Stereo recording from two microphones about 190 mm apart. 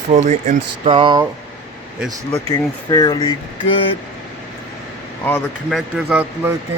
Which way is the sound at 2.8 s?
25° left (ahead or behind).